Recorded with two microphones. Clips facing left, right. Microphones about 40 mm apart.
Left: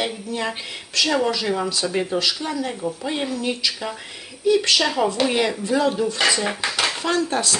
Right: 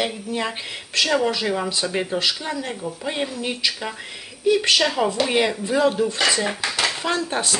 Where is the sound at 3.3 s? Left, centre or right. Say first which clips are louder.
Left 1 dB; right.